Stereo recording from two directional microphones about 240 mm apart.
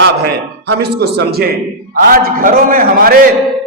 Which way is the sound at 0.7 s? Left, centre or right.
Right.